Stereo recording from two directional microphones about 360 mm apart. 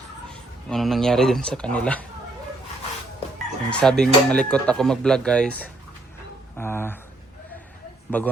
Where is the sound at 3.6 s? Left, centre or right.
Centre.